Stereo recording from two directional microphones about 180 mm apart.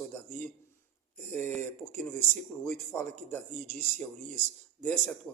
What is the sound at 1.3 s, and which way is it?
A man's voice, 10° left (ahead or behind).